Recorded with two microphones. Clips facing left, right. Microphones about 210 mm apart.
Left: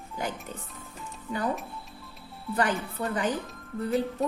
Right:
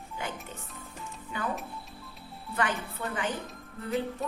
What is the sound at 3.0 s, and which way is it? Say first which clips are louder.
Speech: left 6 dB; 35° left (ahead or behind).